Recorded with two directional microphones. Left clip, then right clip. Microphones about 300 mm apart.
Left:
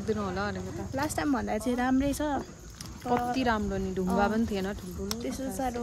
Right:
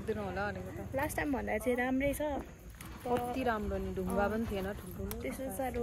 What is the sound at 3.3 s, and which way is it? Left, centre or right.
Speech, left.